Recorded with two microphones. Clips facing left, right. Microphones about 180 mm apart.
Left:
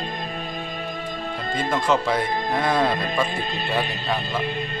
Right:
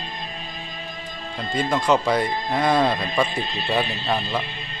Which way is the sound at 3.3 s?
45° left (ahead or behind).